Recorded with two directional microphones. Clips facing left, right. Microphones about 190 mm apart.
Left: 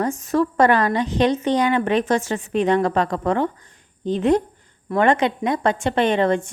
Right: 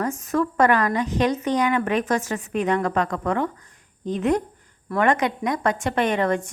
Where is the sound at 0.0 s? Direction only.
30° left (ahead or behind).